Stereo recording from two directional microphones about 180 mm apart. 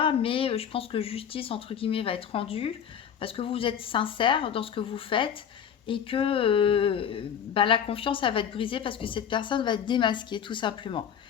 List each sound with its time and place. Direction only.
0.0 s speech: 30° left (ahead or behind)